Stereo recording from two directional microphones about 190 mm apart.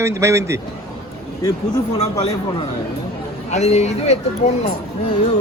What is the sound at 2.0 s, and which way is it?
Speech, 35° left (ahead or behind).